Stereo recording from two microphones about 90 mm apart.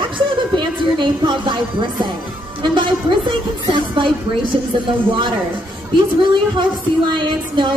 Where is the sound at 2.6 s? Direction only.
65° right (ahead or behind).